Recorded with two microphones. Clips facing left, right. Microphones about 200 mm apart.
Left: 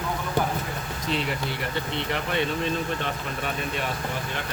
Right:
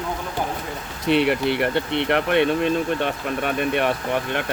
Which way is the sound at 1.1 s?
65° right (ahead or behind).